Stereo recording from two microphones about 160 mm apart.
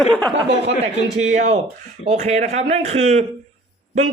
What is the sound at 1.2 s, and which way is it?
Speech, 45° right (ahead or behind).